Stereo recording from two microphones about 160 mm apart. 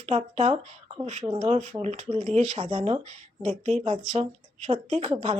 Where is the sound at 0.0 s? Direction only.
40° right (ahead or behind).